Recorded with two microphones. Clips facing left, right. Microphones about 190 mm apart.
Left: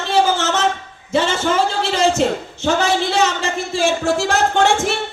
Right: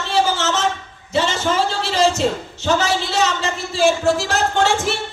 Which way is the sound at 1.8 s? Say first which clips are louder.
Left 1 dB; 55° left (ahead or behind).